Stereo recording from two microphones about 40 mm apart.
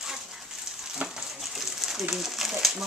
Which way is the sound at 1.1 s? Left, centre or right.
Centre.